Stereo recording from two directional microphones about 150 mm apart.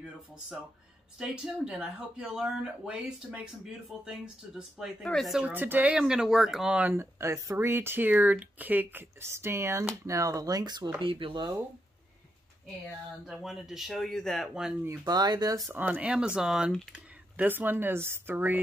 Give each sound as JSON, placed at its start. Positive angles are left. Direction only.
{"t": 1.1, "sound": "speech", "side_deg": -5}
{"t": 13.3, "sound": "speech", "side_deg": -5}
{"t": 14.9, "sound": "speech", "side_deg": -25}
{"t": 15.7, "sound": "speech", "side_deg": -10}